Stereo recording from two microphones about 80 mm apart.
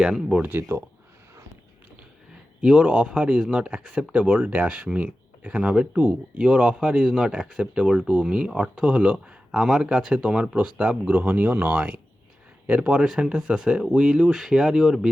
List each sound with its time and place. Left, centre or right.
0.0 s speech: centre
0.4 s speech: right
2.6 s speech: centre